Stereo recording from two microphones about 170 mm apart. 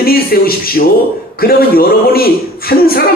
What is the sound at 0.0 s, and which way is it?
A man's voice, 60° left (ahead or behind).